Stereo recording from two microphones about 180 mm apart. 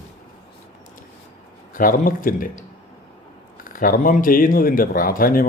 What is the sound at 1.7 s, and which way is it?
Speech, 50° left (ahead or behind).